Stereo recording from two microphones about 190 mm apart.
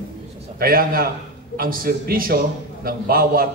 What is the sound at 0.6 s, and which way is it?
A man's voice, 50° right (ahead or behind).